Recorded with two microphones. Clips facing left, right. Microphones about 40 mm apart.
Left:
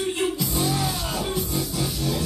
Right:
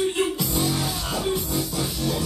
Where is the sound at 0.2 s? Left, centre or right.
Centre.